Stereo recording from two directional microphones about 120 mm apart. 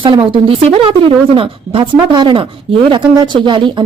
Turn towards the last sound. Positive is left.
turn(degrees=-40)  # may be behind; listen again after turning